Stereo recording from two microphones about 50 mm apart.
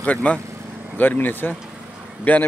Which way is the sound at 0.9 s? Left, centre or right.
Left.